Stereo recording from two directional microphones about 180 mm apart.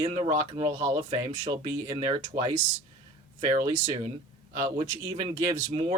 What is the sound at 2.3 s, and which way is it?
Speech, 45° right (ahead or behind).